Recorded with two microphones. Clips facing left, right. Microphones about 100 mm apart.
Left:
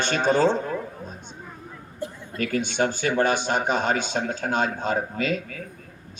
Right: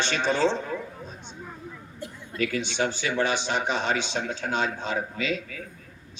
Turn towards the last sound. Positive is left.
turn(degrees=45)  # may be behind; listen again after turning